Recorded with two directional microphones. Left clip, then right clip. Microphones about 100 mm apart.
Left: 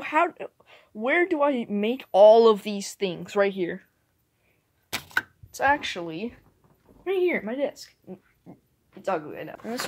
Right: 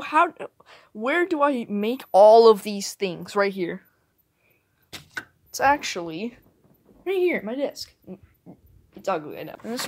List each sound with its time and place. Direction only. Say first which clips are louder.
0.0 s a sound: right 3 dB; 20° right (ahead or behind)
0.3 s speech: right 1 dB; 45° right (ahead or behind)
5.5 s speech: right 3 dB; 45° right (ahead or behind)
9.6 s speech: right 1 dB; 15° right (ahead or behind)